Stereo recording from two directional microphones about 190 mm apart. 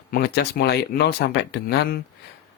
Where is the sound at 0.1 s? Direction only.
55° left (ahead or behind).